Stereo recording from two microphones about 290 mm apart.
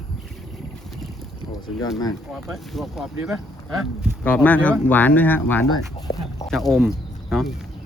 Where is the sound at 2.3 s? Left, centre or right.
Centre.